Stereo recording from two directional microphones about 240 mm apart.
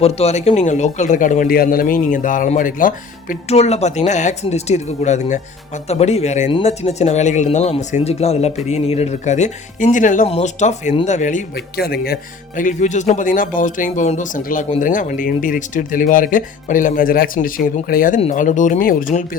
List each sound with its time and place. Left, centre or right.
0.0 s speech: left